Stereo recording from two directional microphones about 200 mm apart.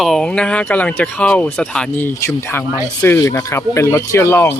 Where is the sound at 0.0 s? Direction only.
Centre (ahead or behind).